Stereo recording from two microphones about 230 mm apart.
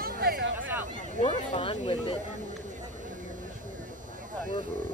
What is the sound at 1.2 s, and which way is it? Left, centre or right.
Speech, left.